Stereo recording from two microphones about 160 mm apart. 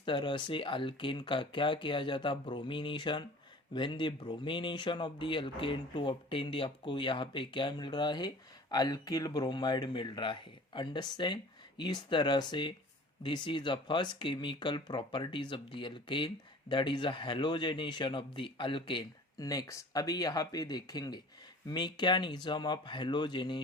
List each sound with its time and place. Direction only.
0.0 s speech: 30° left (ahead or behind)